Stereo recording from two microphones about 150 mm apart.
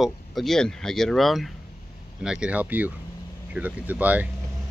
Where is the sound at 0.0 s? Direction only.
Centre (ahead or behind).